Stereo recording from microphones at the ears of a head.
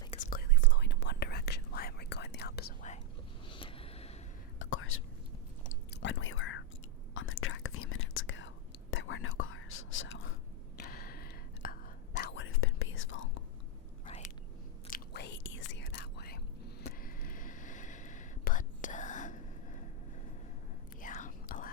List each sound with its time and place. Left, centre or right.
0.1 s whispering: left
4.6 s whispering: left
5.6 s chewing: left
7.1 s whispering: left
14.8 s whispering: left
21.0 s whispering: left